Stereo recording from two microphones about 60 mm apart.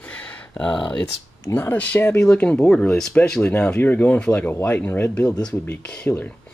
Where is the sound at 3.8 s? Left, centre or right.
Left.